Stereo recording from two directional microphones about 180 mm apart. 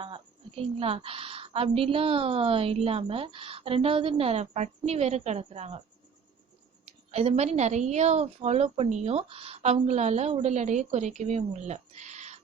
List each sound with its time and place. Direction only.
0.0 s a woman's voice: 30° right (ahead or behind)
6.8 s a woman's voice: 35° right (ahead or behind)